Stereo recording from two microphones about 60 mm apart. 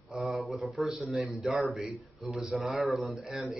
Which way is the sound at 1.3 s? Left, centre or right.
Centre.